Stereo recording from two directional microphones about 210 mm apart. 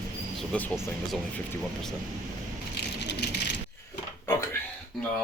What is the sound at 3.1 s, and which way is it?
Rattle, 55° left (ahead or behind).